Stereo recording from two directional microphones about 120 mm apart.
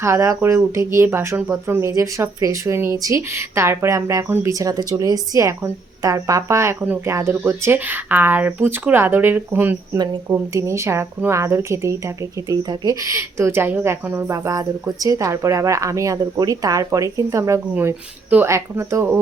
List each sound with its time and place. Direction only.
0.0 s a woman's voice: 25° right (ahead or behind)